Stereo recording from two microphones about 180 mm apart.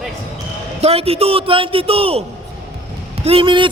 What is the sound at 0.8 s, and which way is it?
A man's voice, 35° right (ahead or behind).